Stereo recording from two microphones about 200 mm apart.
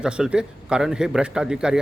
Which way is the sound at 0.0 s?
5° right (ahead or behind).